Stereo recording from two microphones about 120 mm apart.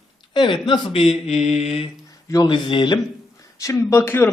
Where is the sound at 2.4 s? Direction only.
40° left (ahead or behind).